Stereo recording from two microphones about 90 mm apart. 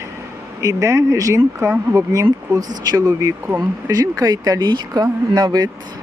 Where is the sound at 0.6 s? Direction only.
40° right (ahead or behind).